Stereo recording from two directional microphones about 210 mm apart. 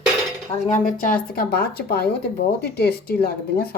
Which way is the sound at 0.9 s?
40° left (ahead or behind).